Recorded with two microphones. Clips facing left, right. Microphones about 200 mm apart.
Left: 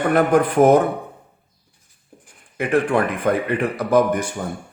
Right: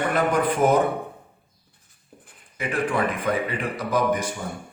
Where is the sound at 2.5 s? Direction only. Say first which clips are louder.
Left 6 dB; 60° left (ahead or behind).